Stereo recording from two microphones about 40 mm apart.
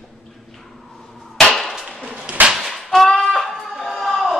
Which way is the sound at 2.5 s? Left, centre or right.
Centre.